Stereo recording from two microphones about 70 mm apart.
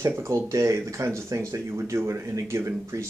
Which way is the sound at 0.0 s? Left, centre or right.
Right.